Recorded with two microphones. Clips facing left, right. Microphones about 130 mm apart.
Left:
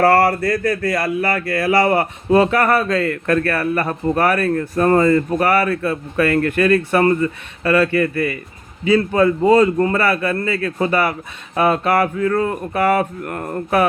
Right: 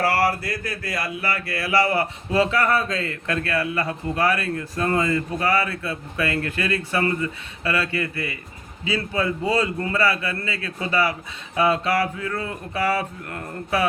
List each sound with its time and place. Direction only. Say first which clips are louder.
0.0 s speech: left 8 dB; 55° left (ahead or behind)